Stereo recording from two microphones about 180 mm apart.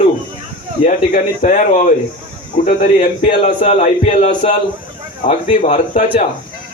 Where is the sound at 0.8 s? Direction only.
50° left (ahead or behind).